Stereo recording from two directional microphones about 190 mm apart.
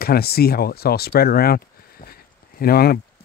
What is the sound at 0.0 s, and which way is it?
Speech, 55° left (ahead or behind).